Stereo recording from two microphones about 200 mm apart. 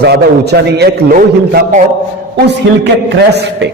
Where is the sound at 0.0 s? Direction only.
55° right (ahead or behind).